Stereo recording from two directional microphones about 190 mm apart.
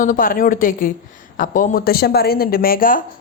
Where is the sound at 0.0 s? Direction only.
45° left (ahead or behind).